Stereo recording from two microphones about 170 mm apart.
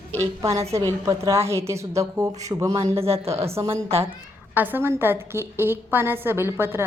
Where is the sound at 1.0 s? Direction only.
15° right (ahead or behind).